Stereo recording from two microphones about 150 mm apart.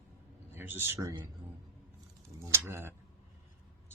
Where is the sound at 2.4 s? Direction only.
20° right (ahead or behind).